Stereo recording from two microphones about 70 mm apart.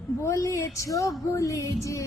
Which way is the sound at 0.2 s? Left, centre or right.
Left.